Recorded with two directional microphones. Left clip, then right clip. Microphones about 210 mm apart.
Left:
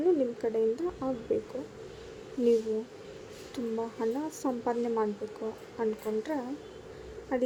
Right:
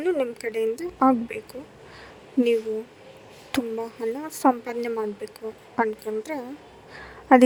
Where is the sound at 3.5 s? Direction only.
50° right (ahead or behind).